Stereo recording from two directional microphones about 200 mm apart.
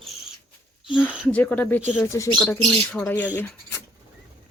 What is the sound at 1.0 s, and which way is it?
Speech, 10° left (ahead or behind).